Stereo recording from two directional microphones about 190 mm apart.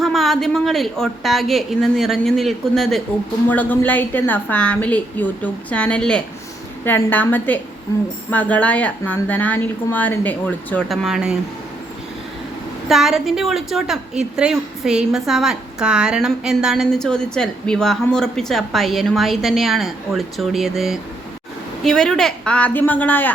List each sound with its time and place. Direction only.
0.0 s a woman's voice: centre (ahead or behind)
12.9 s a woman's voice: centre (ahead or behind)